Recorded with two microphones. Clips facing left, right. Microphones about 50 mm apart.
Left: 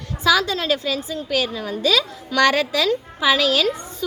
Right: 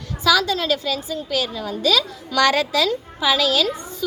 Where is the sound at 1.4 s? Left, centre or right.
Left.